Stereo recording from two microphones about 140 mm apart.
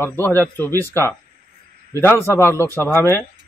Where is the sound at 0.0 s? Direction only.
15° left (ahead or behind).